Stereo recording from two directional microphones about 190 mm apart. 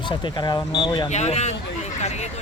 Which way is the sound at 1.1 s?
35° left (ahead or behind).